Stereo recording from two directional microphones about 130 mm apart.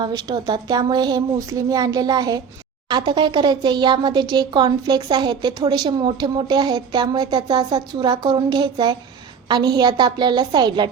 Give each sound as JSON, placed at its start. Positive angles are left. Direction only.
{"t": 0.0, "sound": "speech", "side_deg": -30}